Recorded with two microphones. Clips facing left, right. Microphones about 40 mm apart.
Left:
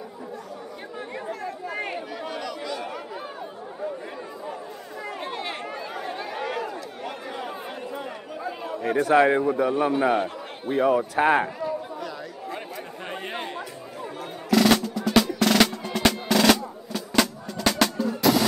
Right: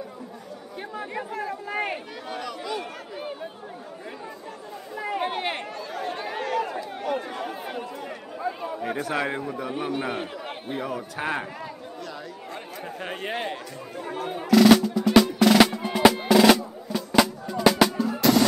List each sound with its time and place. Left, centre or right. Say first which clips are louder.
1.1 s speech: right 1 dB; centre
2.3 s a sound: right 3 dB; centre
4.9 s chatter: right 6 dB; centre
5.2 s chatter: right 3 dB; right
6.1 s chatter: right 1 dB; centre
7.1 s chatter: right 5 dB; centre
8.4 s a man's voice: right 2 dB; centre
9.1 s speech: left 9 dB; centre
9.9 s a man's voice: left 7 dB; centre
10.8 s speech: left 12 dB; centre
13.0 s a sound: right 3 dB; centre
14.5 s music: right 4 dB; centre